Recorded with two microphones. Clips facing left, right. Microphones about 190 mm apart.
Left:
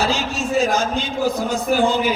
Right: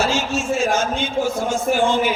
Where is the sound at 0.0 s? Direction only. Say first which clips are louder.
Right 1 dB; 35° left (ahead or behind).